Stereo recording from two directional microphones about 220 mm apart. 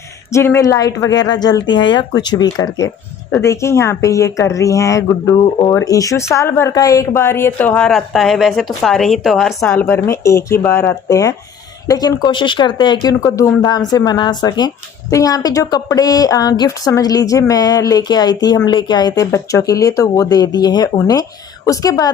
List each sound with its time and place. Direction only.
0.3 s speech: 10° left (ahead or behind)